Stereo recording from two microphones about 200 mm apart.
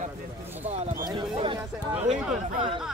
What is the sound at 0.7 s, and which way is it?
Speech, 30° right (ahead or behind).